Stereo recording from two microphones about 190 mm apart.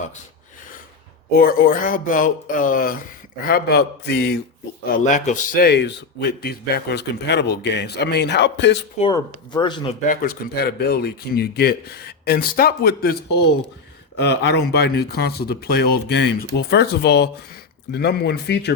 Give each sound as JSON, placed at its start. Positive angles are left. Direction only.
{"t": 1.3, "sound": "speech", "side_deg": 50}
{"t": 4.9, "sound": "speech", "side_deg": 40}
{"t": 9.0, "sound": "speech", "side_deg": 25}
{"t": 10.1, "sound": "speech", "side_deg": 50}